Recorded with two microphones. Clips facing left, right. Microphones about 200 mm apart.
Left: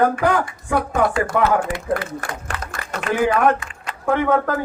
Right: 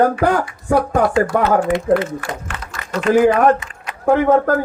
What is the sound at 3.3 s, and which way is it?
Speech, 20° right (ahead or behind).